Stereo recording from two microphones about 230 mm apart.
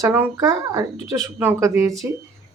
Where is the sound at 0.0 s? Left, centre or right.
Centre.